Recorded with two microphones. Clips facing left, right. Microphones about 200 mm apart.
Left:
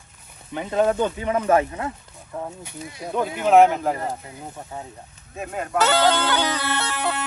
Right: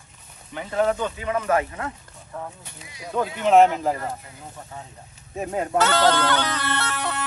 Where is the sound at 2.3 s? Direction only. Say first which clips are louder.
Left 4 dB; 15° left (ahead or behind).